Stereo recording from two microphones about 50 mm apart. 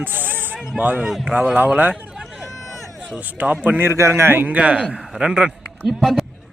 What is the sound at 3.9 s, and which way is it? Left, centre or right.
Speech, right.